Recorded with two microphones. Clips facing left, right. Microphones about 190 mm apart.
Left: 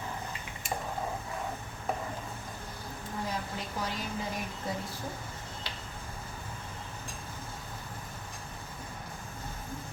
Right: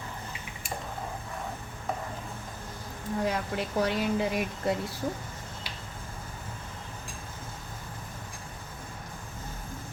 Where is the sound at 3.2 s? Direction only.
70° right (ahead or behind).